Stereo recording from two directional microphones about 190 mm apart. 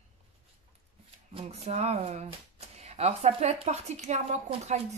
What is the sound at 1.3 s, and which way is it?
Speech, 35° right (ahead or behind).